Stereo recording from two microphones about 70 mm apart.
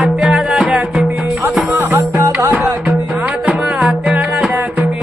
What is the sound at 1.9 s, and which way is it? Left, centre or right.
Music, right.